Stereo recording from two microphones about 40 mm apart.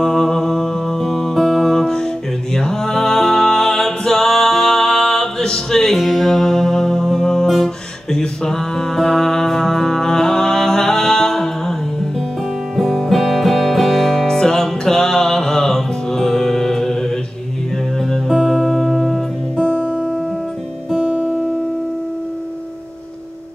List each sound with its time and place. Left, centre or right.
0.0 s music: centre
8.2 s music: centre
18.4 s music: centre
19.6 s music: left